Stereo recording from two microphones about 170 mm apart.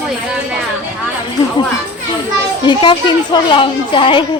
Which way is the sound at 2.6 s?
30° left (ahead or behind).